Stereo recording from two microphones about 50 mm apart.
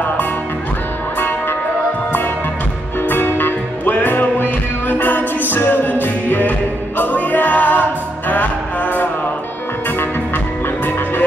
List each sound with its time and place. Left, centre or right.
3.1 s music: left